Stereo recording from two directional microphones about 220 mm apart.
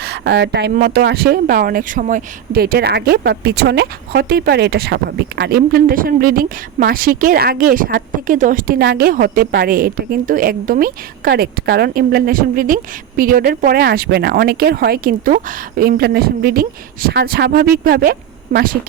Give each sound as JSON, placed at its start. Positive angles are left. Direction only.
{"t": 0.0, "sound": "speech", "side_deg": -45}